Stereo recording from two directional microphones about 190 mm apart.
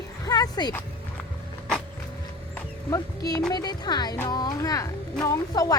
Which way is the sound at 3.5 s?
20° left (ahead or behind).